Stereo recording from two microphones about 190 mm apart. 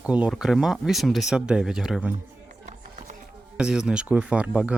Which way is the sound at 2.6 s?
40° right (ahead or behind).